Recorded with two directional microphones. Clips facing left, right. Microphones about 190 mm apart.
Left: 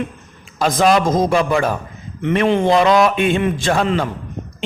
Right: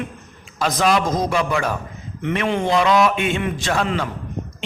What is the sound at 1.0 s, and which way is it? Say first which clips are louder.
Speech: left 5 dB; 50° left (ahead or behind).